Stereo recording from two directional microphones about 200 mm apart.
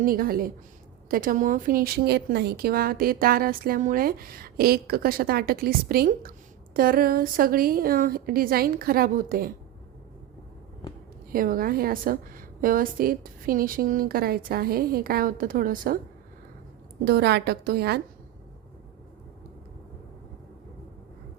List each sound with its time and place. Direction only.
0.0 s speech: 45° right (ahead or behind)
11.3 s speech: 45° right (ahead or behind)
17.1 s speech: 55° right (ahead or behind)